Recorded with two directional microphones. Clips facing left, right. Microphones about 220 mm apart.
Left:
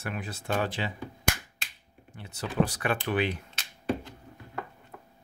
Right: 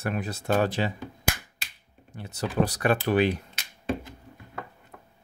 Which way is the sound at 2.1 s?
40° right (ahead or behind).